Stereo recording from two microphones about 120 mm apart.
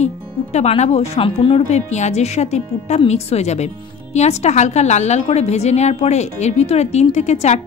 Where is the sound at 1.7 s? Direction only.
70° left (ahead or behind).